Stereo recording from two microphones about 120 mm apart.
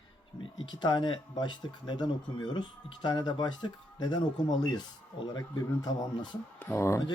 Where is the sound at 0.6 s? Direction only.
40° left (ahead or behind).